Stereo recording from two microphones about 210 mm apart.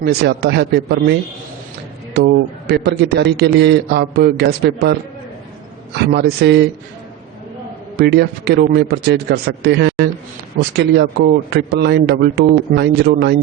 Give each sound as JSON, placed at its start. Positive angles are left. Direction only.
{"t": 0.0, "sound": "a man's voice", "side_deg": -50}
{"t": 2.1, "sound": "a man's voice", "side_deg": -50}
{"t": 6.1, "sound": "a man's voice", "side_deg": -55}
{"t": 7.9, "sound": "a man's voice", "side_deg": -50}